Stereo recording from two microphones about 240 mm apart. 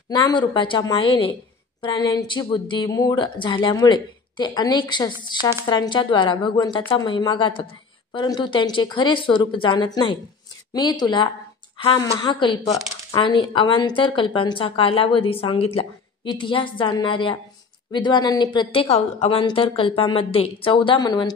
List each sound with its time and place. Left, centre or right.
0.1 s speech: centre